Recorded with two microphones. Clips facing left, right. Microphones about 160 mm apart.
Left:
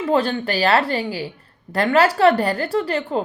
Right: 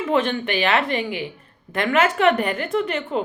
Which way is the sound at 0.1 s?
35° left (ahead or behind).